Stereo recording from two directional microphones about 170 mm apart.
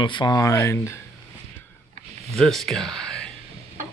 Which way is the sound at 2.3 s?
Centre (ahead or behind).